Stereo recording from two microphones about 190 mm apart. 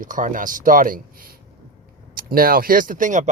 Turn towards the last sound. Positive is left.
turn(degrees=-40)  # may be behind; listen again after turning